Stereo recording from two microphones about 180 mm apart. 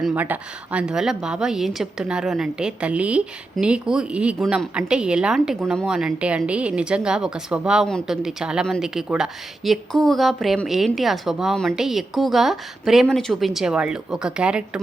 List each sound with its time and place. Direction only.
0.0 s a woman's voice: 10° right (ahead or behind)